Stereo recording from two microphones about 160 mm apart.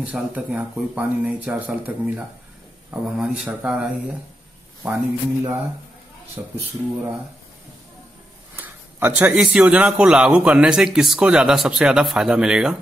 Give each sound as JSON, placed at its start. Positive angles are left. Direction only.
{"t": 0.0, "sound": "a man's voice", "side_deg": -10}
{"t": 4.8, "sound": "speech", "side_deg": -15}
{"t": 6.4, "sound": "speech", "side_deg": -25}
{"t": 8.5, "sound": "a man's voice", "side_deg": -10}